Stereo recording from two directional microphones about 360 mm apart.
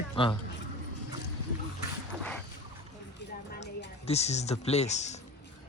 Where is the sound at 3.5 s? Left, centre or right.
Left.